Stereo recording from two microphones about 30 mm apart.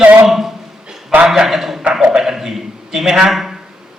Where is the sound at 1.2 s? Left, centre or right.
Centre.